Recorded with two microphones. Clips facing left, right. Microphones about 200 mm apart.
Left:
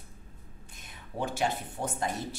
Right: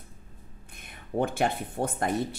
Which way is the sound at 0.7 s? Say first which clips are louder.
Right 7 dB; 55° right (ahead or behind).